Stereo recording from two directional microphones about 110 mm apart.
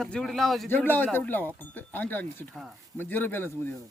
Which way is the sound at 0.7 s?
20° left (ahead or behind).